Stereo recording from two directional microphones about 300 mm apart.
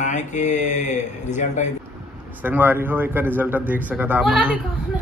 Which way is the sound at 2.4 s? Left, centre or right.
Centre.